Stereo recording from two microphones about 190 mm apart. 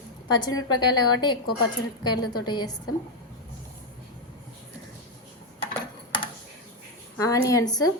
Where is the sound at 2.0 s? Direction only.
25° left (ahead or behind).